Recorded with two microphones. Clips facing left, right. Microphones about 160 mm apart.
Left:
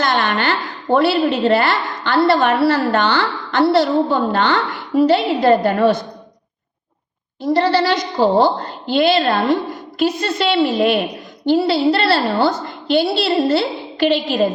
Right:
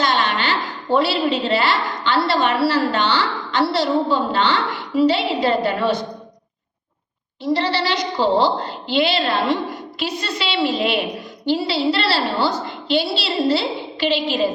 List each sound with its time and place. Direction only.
0.0 s a sound: 50° left (ahead or behind)
0.9 s a woman's voice: 50° left (ahead or behind)
7.4 s a woman's voice: 45° left (ahead or behind)